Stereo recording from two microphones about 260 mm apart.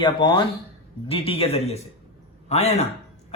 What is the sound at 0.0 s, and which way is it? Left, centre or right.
Speech, centre.